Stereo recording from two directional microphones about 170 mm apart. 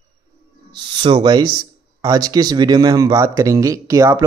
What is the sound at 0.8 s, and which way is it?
Speech, 30° right (ahead or behind).